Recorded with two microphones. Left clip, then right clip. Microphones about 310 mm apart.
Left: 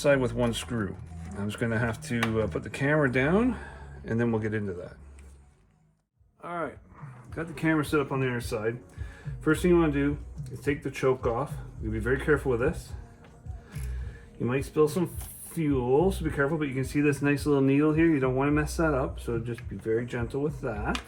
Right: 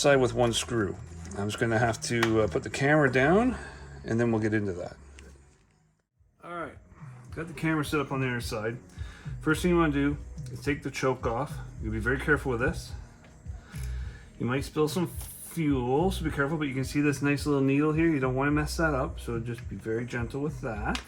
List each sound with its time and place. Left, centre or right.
0.0 s speech: centre
6.4 s a sound: centre
7.3 s speech: centre
14.4 s speech: centre